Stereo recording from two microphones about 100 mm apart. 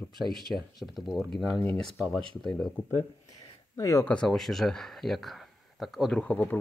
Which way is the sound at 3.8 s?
30° left (ahead or behind).